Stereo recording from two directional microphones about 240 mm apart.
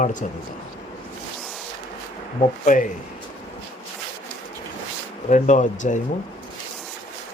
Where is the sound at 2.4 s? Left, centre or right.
Left.